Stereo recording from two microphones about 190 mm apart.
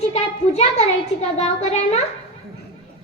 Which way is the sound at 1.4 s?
35° left (ahead or behind).